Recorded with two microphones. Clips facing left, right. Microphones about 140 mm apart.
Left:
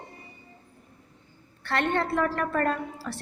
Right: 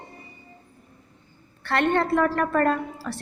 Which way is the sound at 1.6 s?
60° right (ahead or behind).